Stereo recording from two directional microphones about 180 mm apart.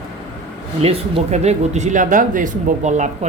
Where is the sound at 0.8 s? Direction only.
35° right (ahead or behind).